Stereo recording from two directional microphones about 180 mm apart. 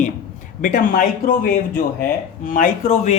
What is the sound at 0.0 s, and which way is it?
A man's voice, 45° left (ahead or behind).